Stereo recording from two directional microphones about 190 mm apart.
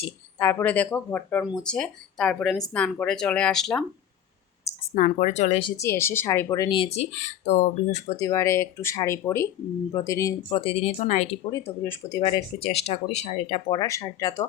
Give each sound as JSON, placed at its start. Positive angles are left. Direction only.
{"t": 0.3, "sound": "speech", "side_deg": 10}
{"t": 4.9, "sound": "speech", "side_deg": 40}
{"t": 5.7, "sound": "speech", "side_deg": 15}
{"t": 8.2, "sound": "speech", "side_deg": 15}
{"t": 10.6, "sound": "speech", "side_deg": 30}
{"t": 11.5, "sound": "speech", "side_deg": 10}
{"t": 12.5, "sound": "speech", "side_deg": 30}
{"t": 13.7, "sound": "speech", "side_deg": 20}